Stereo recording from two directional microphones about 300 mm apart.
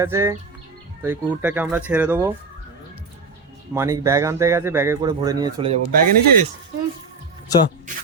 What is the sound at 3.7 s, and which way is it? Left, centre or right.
Speech, centre.